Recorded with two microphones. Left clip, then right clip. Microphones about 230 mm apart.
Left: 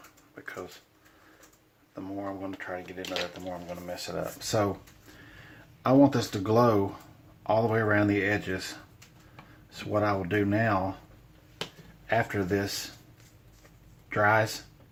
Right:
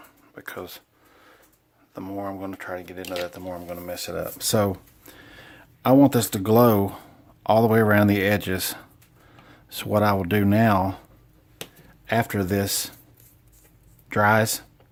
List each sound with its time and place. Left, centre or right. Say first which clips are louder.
0.3 s a sound: right 4 dB; right
2.0 s speech: right 5 dB; right
12.0 s speech: right 4 dB; right
14.1 s speech: right 4 dB; right